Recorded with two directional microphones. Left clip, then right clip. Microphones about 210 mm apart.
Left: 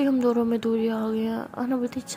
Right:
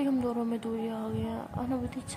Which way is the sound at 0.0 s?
25° left (ahead or behind).